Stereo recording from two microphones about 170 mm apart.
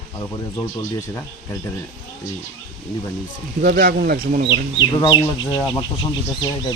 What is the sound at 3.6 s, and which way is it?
Speech, 60° right (ahead or behind).